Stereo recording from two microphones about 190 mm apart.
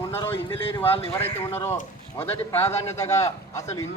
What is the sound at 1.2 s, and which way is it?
A man's voice, 10° left (ahead or behind).